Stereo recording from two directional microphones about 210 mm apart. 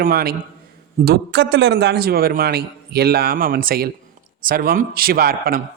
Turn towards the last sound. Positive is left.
turn(degrees=-45)  # may be behind; listen again after turning